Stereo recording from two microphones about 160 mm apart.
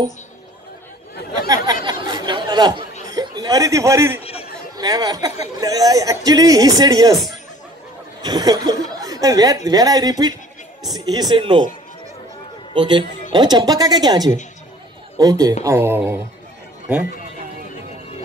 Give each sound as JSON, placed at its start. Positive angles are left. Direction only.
{"t": 1.9, "sound": "a man's voice", "side_deg": -25}
{"t": 4.2, "sound": "chatter", "side_deg": 40}
{"t": 4.7, "sound": "speech", "side_deg": -25}
{"t": 8.2, "sound": "speech", "side_deg": -25}
{"t": 12.7, "sound": "speech", "side_deg": -30}